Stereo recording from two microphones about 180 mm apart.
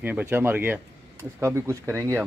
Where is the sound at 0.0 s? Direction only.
10° right (ahead or behind).